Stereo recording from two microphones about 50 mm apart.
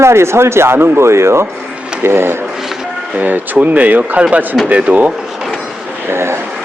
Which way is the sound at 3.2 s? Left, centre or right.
Right.